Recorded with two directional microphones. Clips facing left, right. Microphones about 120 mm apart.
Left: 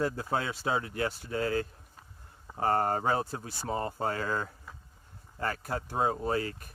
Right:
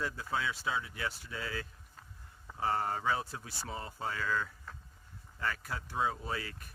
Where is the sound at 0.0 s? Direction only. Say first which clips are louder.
Left 5 dB; 45° left (ahead or behind).